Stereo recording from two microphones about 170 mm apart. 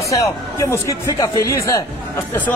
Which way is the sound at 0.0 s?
20° left (ahead or behind).